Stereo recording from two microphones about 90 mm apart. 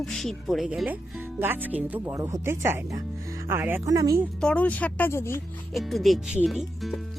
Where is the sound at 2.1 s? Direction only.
35° right (ahead or behind).